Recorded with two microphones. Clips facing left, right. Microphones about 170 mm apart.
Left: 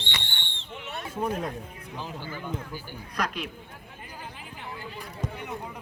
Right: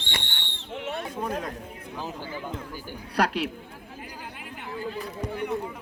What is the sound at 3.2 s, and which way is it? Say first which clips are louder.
Speech: right 7 dB; 70° right (ahead or behind).